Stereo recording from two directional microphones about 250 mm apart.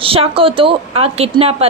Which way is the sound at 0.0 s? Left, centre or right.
Right.